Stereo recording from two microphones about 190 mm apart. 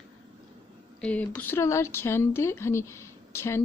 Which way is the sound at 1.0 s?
5° left (ahead or behind).